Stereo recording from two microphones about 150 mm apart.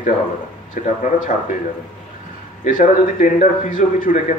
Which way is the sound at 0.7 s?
60° left (ahead or behind).